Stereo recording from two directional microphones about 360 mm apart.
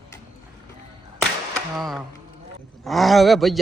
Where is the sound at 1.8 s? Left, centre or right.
Centre.